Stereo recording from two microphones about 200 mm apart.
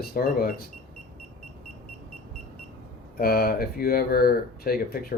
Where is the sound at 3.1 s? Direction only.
50° left (ahead or behind).